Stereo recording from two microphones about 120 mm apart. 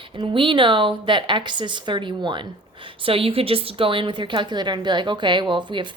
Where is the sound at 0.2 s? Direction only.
45° right (ahead or behind).